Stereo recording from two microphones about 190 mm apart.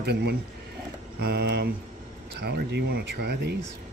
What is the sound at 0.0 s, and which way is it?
Speech, 60° right (ahead or behind).